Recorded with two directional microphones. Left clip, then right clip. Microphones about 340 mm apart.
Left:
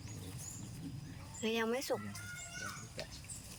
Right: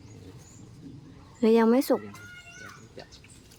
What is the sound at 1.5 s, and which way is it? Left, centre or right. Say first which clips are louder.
Speech: right 15 dB; centre.